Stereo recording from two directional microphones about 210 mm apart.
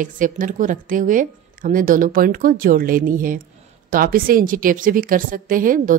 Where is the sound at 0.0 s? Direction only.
40° right (ahead or behind).